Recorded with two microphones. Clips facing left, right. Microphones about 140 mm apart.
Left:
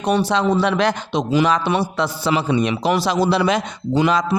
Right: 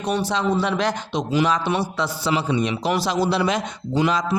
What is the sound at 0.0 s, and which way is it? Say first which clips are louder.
Speech: left 4 dB; 70° left (ahead or behind).